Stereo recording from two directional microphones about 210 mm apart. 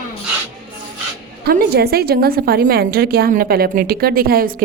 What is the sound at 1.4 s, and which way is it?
A woman's voice, 50° right (ahead or behind).